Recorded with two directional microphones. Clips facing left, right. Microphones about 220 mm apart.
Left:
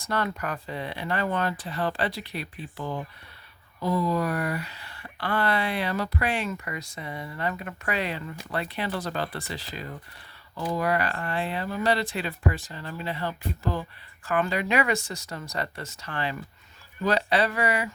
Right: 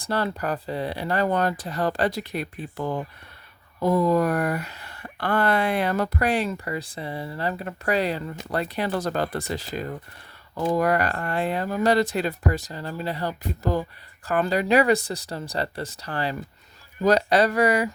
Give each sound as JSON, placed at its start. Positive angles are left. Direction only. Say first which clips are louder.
{"t": 0.0, "sound": "speech", "louder": "right 3 dB", "side_deg": -30}